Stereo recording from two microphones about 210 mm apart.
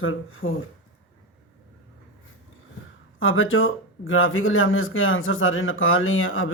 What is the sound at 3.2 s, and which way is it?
Speech, 70° left (ahead or behind).